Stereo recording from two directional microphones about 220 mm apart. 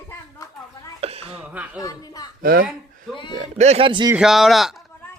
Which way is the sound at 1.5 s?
5° right (ahead or behind).